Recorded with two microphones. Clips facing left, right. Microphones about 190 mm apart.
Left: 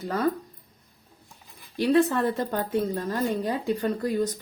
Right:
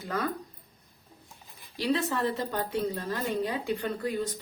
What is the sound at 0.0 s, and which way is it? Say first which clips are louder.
Speech: left 4 dB; 35° left (ahead or behind).